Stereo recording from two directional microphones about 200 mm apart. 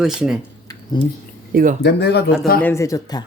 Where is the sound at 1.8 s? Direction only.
55° left (ahead or behind).